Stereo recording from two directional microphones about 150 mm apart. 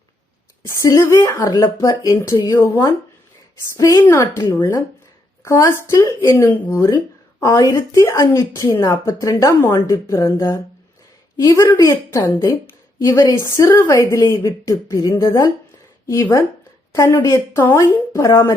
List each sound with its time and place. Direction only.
0.6 s a woman's voice: 20° left (ahead or behind)
2.6 s a woman's voice: 15° left (ahead or behind)